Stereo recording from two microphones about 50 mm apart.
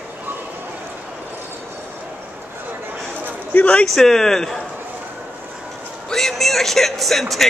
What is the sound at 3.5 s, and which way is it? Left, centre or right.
Speech, left.